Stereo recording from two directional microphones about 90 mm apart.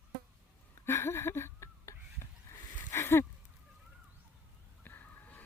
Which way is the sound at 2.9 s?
30° left (ahead or behind).